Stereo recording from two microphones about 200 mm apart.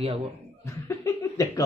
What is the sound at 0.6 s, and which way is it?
Speech, 15° left (ahead or behind).